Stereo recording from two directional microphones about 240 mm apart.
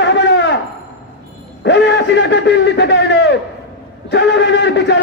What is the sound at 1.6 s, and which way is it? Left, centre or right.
A man's voice, left.